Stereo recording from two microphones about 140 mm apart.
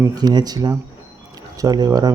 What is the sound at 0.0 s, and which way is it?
Speech, 30° right (ahead or behind).